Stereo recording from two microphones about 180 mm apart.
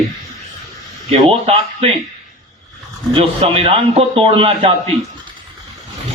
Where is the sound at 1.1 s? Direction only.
35° right (ahead or behind).